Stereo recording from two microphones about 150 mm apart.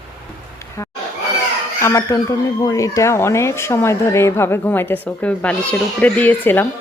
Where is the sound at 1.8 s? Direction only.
20° left (ahead or behind).